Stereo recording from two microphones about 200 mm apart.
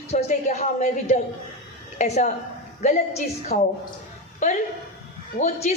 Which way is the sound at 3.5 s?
40° left (ahead or behind).